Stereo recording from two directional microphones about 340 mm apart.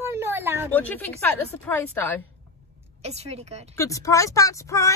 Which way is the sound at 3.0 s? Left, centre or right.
Centre.